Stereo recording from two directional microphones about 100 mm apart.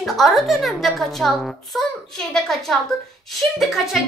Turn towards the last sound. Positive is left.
turn(degrees=0)  # may be behind; listen again after turning